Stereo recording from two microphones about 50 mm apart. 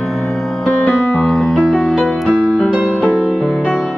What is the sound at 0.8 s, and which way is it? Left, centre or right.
Keyboard, centre.